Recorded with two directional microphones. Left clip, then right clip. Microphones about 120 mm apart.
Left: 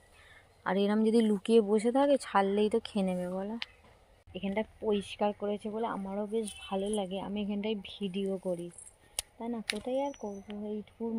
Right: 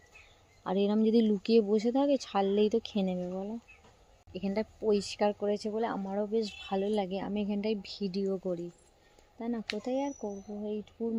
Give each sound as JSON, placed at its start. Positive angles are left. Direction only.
{"t": 0.6, "sound": "speech", "side_deg": -15}
{"t": 2.5, "sound": "speech", "side_deg": -30}
{"t": 3.2, "sound": "speech", "side_deg": 0}
{"t": 4.3, "sound": "speech", "side_deg": -25}
{"t": 7.4, "sound": "speech", "side_deg": -30}